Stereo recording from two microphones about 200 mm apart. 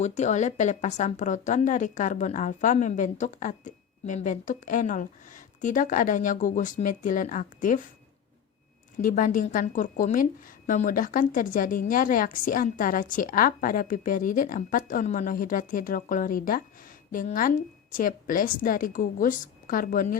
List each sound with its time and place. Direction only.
0.0 s speech: 35° left (ahead or behind)
9.0 s a woman's voice: 40° left (ahead or behind)